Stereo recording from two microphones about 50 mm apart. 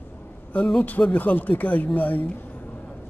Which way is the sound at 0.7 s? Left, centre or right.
Left.